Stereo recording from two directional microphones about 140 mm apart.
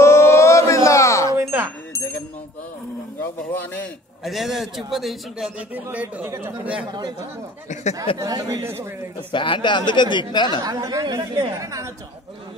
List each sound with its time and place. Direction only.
0.0 s a sound: 20° left (ahead or behind)
1.3 s wind chime: 15° right (ahead or behind)
3.2 s speech: 10° left (ahead or behind)
4.2 s a man's voice: centre (ahead or behind)
5.9 s speech: 10° right (ahead or behind)
6.9 s speech: 30° right (ahead or behind)
9.3 s speech: 35° left (ahead or behind)
10.6 s speech: 25° right (ahead or behind)